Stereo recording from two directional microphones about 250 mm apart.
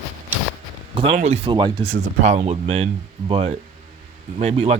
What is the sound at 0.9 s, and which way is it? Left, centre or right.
Speech, right.